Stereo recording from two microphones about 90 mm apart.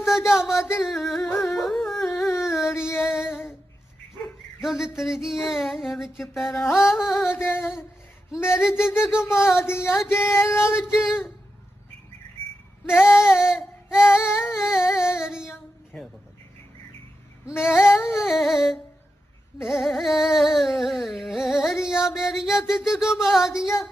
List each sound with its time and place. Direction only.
0.0 s a sound: 5° right (ahead or behind)
0.9 s music: centre (ahead or behind)
1.4 s carnatic music: centre (ahead or behind)
2.4 s a sound: 5° right (ahead or behind)
2.7 s music: 30° left (ahead or behind)
4.6 s carnatic music: 5° right (ahead or behind)
7.3 s female singing: 25° left (ahead or behind)
8.3 s a sound: 10° right (ahead or behind)
9.2 s female singing: 30° left (ahead or behind)
11.0 s carnatic music: 5° right (ahead or behind)
12.8 s female singing: 25° left (ahead or behind)
13.1 s a sound: 5° right (ahead or behind)
17.5 s female singing: 30° left (ahead or behind)
18.1 s carnatic music: 5° right (ahead or behind)